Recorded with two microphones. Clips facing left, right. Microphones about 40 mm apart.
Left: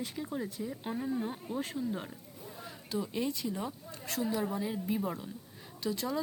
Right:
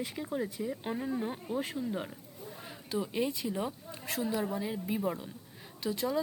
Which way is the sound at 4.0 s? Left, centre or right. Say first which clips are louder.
Even; centre.